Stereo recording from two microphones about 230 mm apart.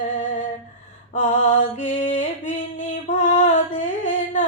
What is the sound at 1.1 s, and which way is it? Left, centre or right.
Mantra, left.